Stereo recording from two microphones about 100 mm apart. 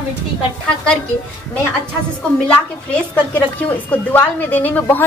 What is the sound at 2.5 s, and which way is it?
A woman's voice, 15° left (ahead or behind).